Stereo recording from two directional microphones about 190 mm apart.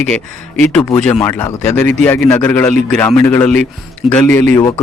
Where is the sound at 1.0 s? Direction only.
5° left (ahead or behind).